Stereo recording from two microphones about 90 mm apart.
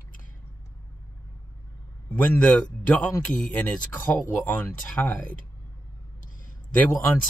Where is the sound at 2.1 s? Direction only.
15° left (ahead or behind).